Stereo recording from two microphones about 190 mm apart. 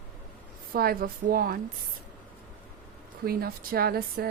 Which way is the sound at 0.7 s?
50° right (ahead or behind).